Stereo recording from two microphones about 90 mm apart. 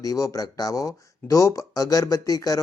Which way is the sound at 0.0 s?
40° left (ahead or behind).